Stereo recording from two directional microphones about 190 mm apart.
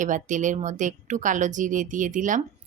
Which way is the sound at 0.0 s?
40° right (ahead or behind).